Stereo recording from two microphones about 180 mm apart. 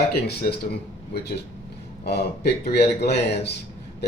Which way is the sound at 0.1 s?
60° left (ahead or behind).